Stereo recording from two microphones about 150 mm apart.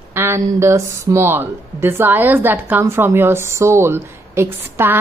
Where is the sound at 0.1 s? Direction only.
15° right (ahead or behind).